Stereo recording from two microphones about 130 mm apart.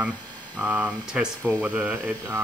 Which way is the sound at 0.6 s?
15° right (ahead or behind).